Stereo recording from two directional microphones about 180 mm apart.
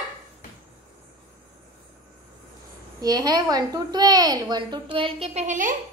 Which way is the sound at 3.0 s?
20° right (ahead or behind).